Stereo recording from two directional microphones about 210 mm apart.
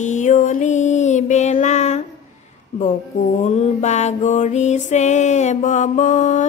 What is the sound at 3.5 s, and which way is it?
Mantra, 35° left (ahead or behind).